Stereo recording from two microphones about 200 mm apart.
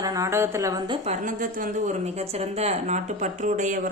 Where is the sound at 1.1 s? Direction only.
40° right (ahead or behind).